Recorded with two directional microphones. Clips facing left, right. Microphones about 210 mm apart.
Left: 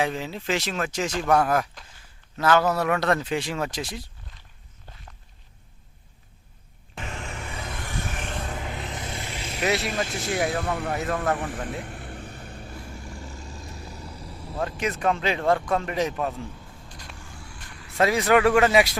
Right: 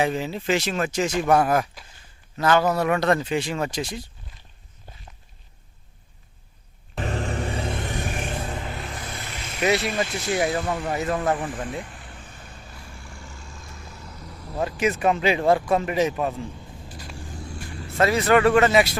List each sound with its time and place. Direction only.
0.0 s speech: centre (ahead or behind)
4.9 s walk: 10° right (ahead or behind)
6.9 s vehicle: 35° right (ahead or behind); by 8.5 s 5° right (ahead or behind)
8.5 s vehicle: 10° left (ahead or behind); by 9.6 s 30° left (ahead or behind)
9.6 s speech: centre (ahead or behind)
11.9 s vehicle: 55° left (ahead or behind)
12.7 s vehicle: 40° left (ahead or behind)
14.8 s speech: 5° right (ahead or behind)
16.6 s a sound: 20° right (ahead or behind)
16.9 s vehicle: 5° right (ahead or behind)
17.2 s vehicle: 35° right (ahead or behind)
18.0 s speech: 15° left (ahead or behind)